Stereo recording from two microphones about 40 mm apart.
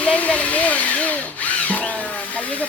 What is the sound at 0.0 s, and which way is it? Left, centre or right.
Music, left.